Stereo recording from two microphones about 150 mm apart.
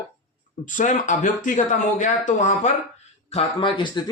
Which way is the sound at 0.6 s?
60° left (ahead or behind).